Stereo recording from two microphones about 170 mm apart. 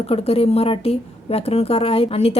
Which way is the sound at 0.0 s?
35° left (ahead or behind).